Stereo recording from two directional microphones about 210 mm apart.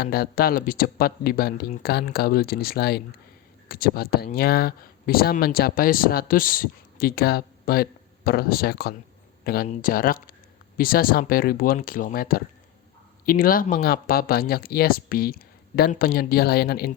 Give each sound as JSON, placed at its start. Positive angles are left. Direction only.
{"t": 0.0, "sound": "speech", "side_deg": 45}